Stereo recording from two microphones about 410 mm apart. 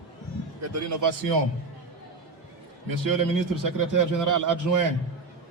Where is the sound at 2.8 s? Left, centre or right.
Right.